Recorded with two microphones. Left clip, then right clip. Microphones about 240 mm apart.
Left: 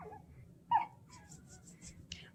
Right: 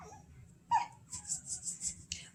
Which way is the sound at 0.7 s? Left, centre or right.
Centre.